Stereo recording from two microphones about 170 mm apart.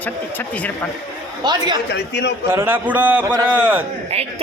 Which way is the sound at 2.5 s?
10° right (ahead or behind).